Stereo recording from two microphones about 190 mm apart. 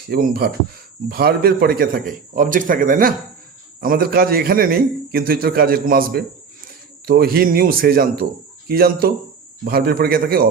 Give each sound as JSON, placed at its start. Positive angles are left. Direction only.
{"t": 0.1, "sound": "a man's voice", "side_deg": -55}